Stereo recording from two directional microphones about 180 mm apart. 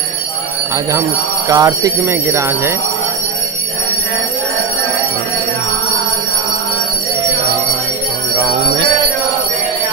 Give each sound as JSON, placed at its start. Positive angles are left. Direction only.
{"t": 1.5, "sound": "speech", "side_deg": -20}